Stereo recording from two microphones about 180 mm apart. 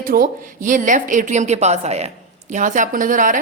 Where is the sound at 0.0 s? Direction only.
50° right (ahead or behind).